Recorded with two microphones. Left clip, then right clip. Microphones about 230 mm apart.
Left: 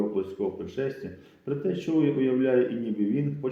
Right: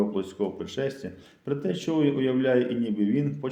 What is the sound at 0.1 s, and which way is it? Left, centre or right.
Speech, right.